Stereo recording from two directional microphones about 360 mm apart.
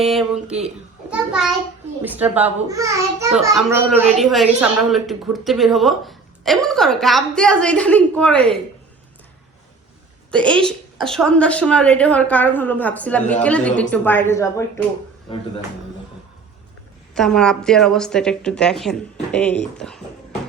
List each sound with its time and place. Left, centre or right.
0.0 s a child's voice: centre
10.6 s a child's voice: centre
17.2 s a child's voice: centre